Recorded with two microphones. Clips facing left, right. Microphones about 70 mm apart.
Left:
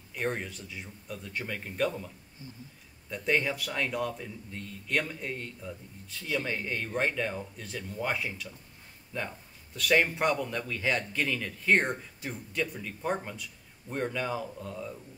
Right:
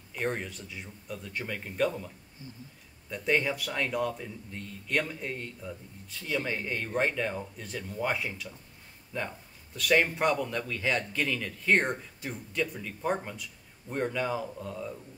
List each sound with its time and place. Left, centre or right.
0.1 s a man's voice: centre